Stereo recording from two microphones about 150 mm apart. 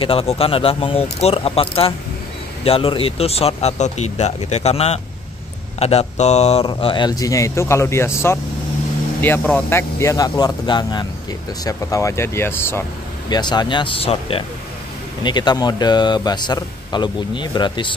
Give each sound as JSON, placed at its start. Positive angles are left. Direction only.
{"t": 0.0, "sound": "speech", "side_deg": 40}
{"t": 6.7, "sound": "a man's voice", "side_deg": 30}
{"t": 13.3, "sound": "a man's voice", "side_deg": 30}